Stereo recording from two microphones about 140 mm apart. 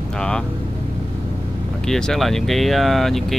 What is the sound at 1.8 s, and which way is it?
Speech, 5° left (ahead or behind).